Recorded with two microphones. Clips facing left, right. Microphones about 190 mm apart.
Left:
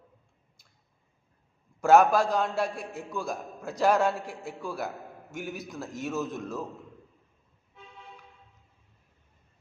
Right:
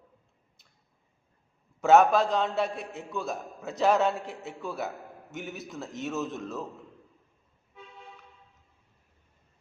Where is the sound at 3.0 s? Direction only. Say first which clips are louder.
Right 1 dB; centre (ahead or behind).